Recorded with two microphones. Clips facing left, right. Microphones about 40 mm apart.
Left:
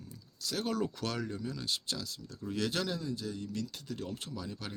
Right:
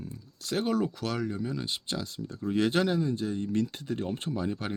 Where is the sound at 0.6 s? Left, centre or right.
Centre.